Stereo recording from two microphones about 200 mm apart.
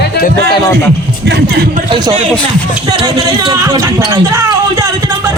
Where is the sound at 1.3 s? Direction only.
55° right (ahead or behind).